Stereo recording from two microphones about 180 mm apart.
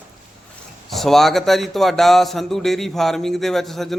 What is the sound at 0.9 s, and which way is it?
Speech, centre (ahead or behind).